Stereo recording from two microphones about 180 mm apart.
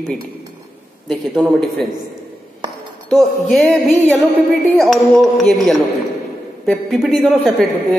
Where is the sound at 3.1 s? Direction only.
Centre (ahead or behind).